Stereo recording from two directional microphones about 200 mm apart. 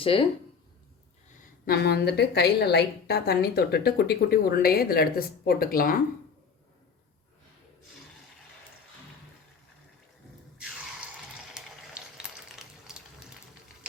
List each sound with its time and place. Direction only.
0.0 s speech: 25° left (ahead or behind)
1.6 s a woman's voice: 50° left (ahead or behind)
11.5 s a sound: 5° right (ahead or behind)